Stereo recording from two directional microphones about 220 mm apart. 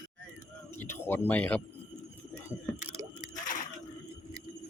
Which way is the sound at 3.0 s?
15° right (ahead or behind).